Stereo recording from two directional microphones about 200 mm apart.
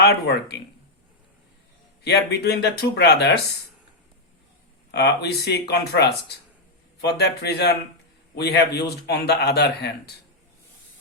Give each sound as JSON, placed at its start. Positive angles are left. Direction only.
{"t": 0.0, "sound": "a man's voice", "side_deg": 55}
{"t": 2.0, "sound": "speech", "side_deg": 55}
{"t": 4.9, "sound": "a man's voice", "side_deg": 55}